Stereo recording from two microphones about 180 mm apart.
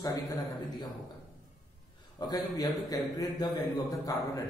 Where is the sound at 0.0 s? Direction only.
20° left (ahead or behind).